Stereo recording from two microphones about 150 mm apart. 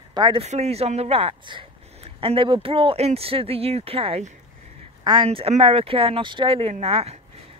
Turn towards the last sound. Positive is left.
turn(degrees=-40)  # may be behind; listen again after turning